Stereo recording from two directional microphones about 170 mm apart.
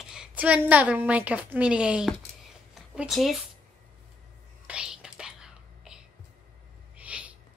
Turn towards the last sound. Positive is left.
turn(degrees=-10)  # may be behind; listen again after turning